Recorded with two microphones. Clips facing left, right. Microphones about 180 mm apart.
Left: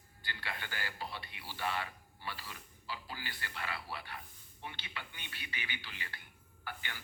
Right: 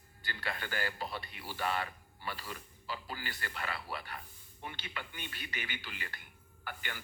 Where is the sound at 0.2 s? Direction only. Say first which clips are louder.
Right 4 dB; 45° right (ahead or behind).